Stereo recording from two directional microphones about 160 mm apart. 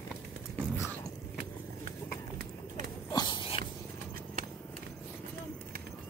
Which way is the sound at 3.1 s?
30° left (ahead or behind).